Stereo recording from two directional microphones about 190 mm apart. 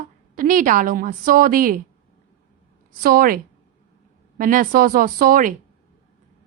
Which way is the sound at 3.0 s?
50° right (ahead or behind).